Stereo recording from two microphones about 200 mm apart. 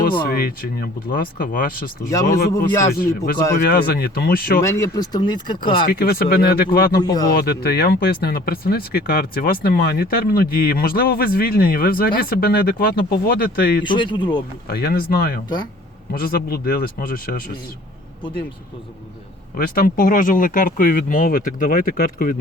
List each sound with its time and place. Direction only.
0.0 s speech: 50° left (ahead or behind)
2.0 s speech: 15° left (ahead or behind)
3.6 s speech: 50° left (ahead or behind)
4.6 s speech: 15° left (ahead or behind)
5.8 s speech: 50° left (ahead or behind)
7.0 s speech: 20° left (ahead or behind)
7.3 s speech: 50° left (ahead or behind)
13.8 s speech: 25° left (ahead or behind)
14.7 s speech: 50° left (ahead or behind)
19.5 s speech: 50° left (ahead or behind)